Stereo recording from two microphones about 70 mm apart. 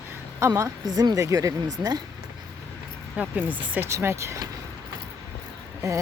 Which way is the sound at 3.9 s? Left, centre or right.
Right.